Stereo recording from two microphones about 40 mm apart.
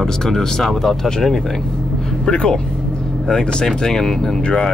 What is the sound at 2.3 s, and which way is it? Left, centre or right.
Speech, left.